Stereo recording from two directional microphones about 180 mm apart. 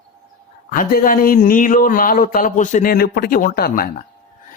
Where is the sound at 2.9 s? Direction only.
60° left (ahead or behind).